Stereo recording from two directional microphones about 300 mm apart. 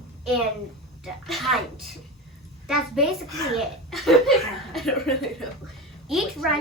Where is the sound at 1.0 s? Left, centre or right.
Centre.